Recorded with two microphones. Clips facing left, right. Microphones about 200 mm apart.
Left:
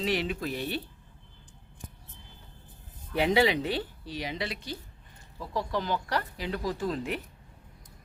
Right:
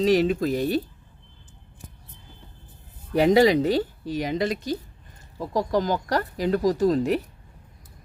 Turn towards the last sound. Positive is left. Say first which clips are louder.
# right 10 dB
turn(degrees=-40)  # may be behind; listen again after turning